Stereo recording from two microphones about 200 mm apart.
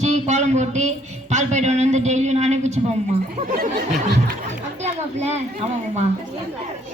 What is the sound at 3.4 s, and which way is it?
Snicker, 45° right (ahead or behind).